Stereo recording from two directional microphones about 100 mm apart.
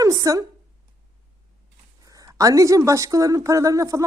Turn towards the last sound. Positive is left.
turn(degrees=-35)  # may be behind; listen again after turning